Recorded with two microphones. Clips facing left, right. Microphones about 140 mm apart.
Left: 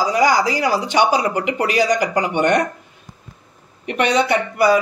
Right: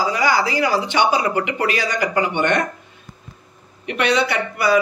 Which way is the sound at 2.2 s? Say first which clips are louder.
Even; 40° left (ahead or behind).